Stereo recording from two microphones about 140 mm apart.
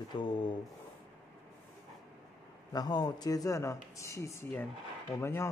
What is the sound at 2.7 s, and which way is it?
A man's voice, 30° left (ahead or behind).